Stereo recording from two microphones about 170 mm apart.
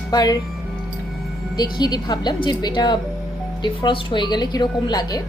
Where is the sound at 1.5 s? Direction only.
25° left (ahead or behind).